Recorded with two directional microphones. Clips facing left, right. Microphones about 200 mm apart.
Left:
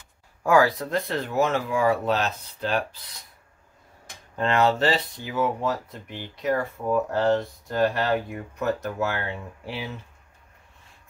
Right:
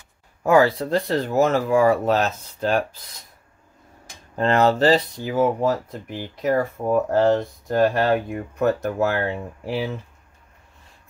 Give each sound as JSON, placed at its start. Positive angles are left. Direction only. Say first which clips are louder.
{"t": 0.4, "sound": "speech", "louder": "right 3 dB", "side_deg": -25}
{"t": 4.4, "sound": "speech", "louder": "right 4 dB", "side_deg": -40}